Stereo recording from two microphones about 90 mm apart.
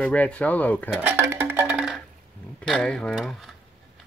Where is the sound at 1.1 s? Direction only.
30° right (ahead or behind).